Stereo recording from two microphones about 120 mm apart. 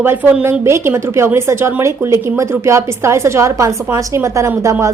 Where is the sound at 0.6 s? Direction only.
20° right (ahead or behind).